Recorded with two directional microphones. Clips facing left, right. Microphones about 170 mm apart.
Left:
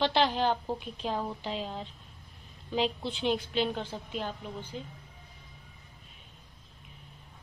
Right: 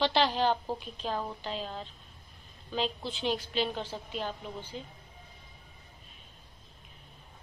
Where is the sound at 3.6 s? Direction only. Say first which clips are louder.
Left 2 dB; 5° left (ahead or behind).